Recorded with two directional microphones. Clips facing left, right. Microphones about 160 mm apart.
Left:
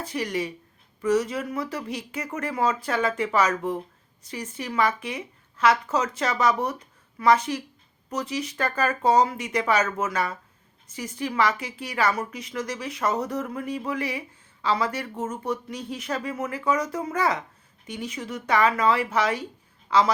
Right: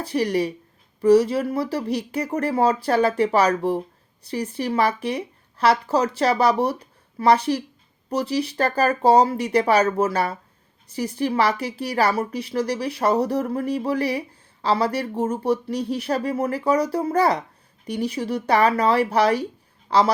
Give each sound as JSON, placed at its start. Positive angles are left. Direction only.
{"t": 0.0, "sound": "speech", "side_deg": -35}